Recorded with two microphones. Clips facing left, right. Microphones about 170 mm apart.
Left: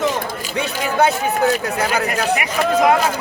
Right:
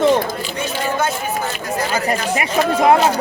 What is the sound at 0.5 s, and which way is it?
Speech, 65° left (ahead or behind).